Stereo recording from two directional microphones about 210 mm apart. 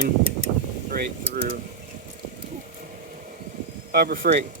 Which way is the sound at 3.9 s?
45° right (ahead or behind).